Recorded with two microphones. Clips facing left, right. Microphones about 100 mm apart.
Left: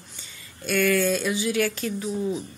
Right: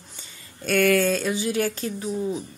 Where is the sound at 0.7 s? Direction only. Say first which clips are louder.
Right 2 dB; 60° right (ahead or behind).